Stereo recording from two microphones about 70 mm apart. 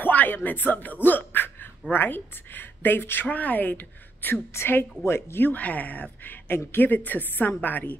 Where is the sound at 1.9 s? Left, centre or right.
Left.